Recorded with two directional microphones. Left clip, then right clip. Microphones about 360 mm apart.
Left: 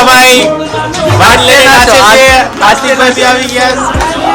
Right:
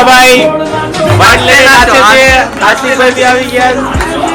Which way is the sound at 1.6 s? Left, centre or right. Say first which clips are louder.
Even; left.